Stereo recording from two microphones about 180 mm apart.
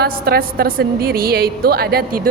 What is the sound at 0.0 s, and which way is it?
A woman's voice, 60° right (ahead or behind).